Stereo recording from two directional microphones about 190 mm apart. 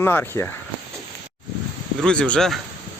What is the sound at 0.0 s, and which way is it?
Speech, 10° left (ahead or behind).